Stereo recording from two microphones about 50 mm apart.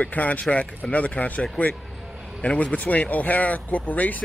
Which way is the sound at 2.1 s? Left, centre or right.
Centre.